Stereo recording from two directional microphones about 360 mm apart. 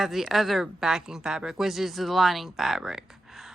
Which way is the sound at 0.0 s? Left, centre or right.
Centre.